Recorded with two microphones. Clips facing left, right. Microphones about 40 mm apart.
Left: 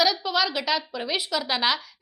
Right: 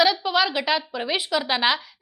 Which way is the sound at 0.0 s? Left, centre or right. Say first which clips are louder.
Right 3 dB; centre.